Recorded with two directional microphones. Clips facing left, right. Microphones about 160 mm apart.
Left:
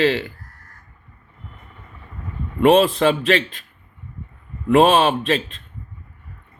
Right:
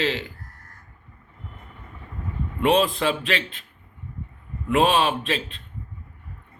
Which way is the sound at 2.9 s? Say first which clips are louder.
Left 7 dB; 40° left (ahead or behind).